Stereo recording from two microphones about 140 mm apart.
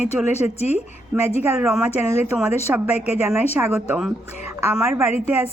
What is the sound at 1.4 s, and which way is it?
Speech, 15° right (ahead or behind).